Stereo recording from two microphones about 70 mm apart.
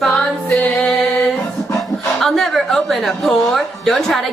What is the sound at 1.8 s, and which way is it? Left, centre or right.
Speech, centre.